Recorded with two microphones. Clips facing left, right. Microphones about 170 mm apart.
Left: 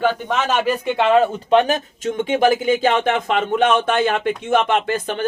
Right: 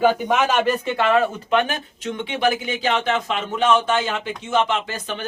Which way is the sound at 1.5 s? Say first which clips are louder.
Left 5 dB; 35° left (ahead or behind).